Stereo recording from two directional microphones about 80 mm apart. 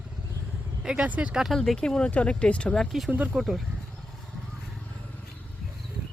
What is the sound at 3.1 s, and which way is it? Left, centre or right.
Speech, centre.